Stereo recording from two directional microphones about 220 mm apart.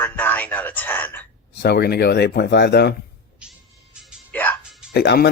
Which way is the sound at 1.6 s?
45° left (ahead or behind).